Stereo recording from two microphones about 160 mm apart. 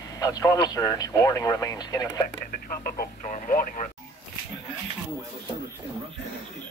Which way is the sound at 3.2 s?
50° left (ahead or behind).